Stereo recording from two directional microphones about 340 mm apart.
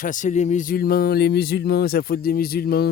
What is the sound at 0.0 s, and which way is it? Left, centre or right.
Speech, left.